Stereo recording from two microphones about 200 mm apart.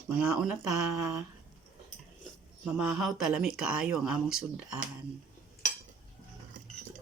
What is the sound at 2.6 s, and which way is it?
Speech, 5° right (ahead or behind).